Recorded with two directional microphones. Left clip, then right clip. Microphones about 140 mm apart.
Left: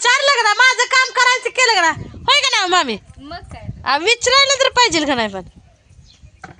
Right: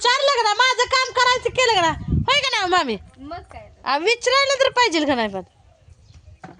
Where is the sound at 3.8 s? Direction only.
30° left (ahead or behind).